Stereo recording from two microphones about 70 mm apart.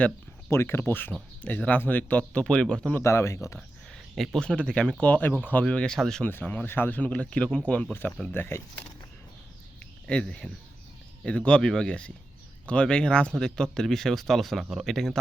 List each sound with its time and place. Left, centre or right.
0.5 s speech: left; by 2.9 s centre
3.0 s speech: left
4.1 s speech: centre
4.4 s speech: centre
5.6 s speech: centre
6.2 s speech: left
8.3 s speech: left
10.1 s speech: centre